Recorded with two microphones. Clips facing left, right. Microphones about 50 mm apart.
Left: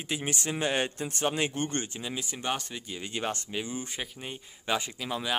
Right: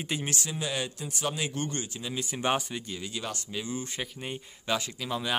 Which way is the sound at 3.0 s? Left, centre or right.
Left.